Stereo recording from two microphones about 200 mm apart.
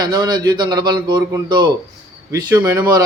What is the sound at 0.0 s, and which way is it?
A man's voice, 20° right (ahead or behind).